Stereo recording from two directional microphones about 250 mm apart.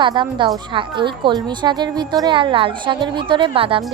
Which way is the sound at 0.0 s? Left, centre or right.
Centre.